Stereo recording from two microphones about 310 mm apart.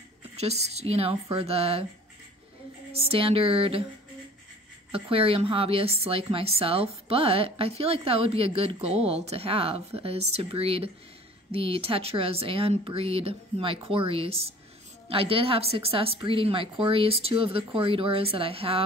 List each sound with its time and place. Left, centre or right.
0.4 s a woman's voice: right
2.9 s speech: centre
4.9 s a woman's voice: centre